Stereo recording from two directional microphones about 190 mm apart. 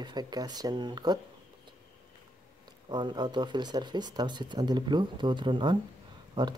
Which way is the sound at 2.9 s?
25° right (ahead or behind).